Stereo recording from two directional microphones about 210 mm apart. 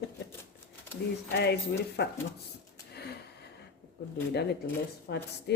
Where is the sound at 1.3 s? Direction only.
50° left (ahead or behind).